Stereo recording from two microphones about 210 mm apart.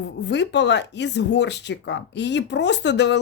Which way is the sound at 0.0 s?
55° left (ahead or behind).